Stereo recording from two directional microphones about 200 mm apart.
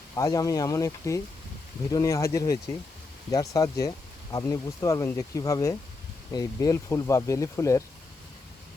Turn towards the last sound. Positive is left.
turn(degrees=15)  # may be behind; listen again after turning